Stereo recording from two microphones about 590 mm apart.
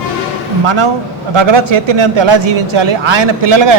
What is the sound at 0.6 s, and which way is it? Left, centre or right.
A man's voice, right.